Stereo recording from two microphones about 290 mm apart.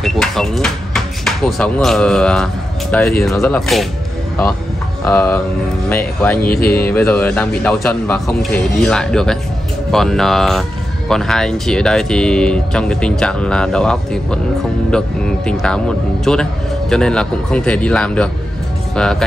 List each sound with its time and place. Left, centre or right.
0.0 s speech: centre
5.0 s speech: centre
6.4 s mantra: left
6.9 s speech: centre